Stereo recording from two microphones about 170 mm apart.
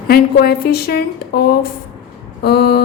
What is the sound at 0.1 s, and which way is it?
A woman's voice, 65° left (ahead or behind).